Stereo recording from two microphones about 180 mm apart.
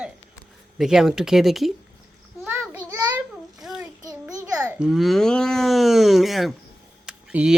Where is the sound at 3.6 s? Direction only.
Centre (ahead or behind).